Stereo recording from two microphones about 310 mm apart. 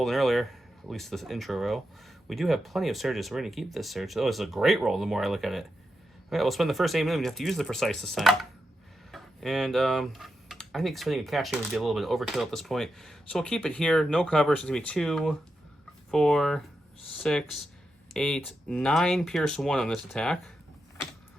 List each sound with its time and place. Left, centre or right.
0.0 s speech: centre